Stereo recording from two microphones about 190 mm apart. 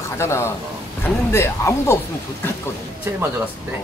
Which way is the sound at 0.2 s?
15° left (ahead or behind).